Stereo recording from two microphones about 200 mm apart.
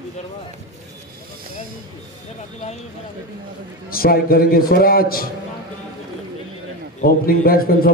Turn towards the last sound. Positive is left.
turn(degrees=45)  # may be behind; listen again after turning